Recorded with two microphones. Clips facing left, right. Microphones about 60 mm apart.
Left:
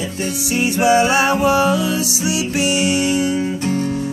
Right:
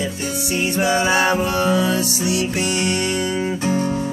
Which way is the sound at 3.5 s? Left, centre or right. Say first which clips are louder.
Even; centre.